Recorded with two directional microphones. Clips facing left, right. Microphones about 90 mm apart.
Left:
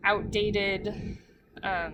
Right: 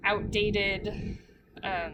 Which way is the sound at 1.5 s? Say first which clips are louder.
Left 2 dB; 25° left (ahead or behind).